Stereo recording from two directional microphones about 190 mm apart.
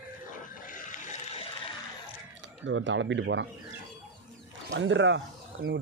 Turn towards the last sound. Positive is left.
turn(degrees=-75)  # may be behind; listen again after turning